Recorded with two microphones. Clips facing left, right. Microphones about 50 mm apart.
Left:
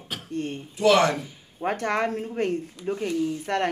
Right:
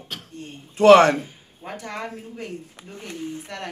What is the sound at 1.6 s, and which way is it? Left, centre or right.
Speech, left.